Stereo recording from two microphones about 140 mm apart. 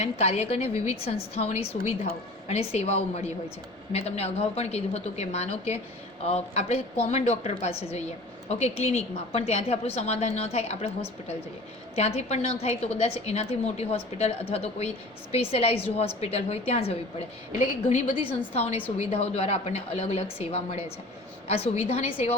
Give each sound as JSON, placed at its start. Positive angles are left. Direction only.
{"t": 0.0, "sound": "a woman's voice", "side_deg": 50}
{"t": 11.9, "sound": "a woman's voice", "side_deg": 50}
{"t": 18.1, "sound": "a woman's voice", "side_deg": 45}